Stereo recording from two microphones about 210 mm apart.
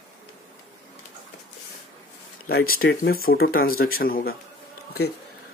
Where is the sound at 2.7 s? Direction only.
45° left (ahead or behind).